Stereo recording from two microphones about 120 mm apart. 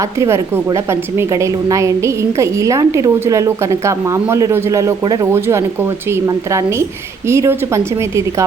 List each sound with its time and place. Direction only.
0.0 s a woman's voice: 25° right (ahead or behind)